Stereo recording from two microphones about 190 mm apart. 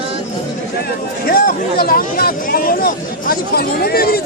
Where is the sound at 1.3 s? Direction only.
50° left (ahead or behind).